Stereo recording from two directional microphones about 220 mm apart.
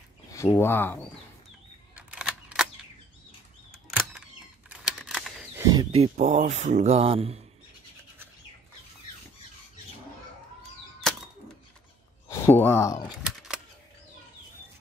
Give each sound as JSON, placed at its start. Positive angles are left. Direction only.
{"t": 0.3, "sound": "speech", "side_deg": 15}
{"t": 2.0, "sound": "single-lens reflex camera", "side_deg": -5}
{"t": 4.6, "sound": "crumpling", "side_deg": -5}
{"t": 5.7, "sound": "speech", "side_deg": -15}
{"t": 5.9, "sound": "speech", "side_deg": -30}
{"t": 12.3, "sound": "speech", "side_deg": 10}
{"t": 13.2, "sound": "a sound", "side_deg": 0}